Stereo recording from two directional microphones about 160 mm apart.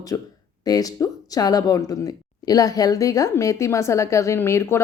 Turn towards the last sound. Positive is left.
turn(degrees=15)  # may be behind; listen again after turning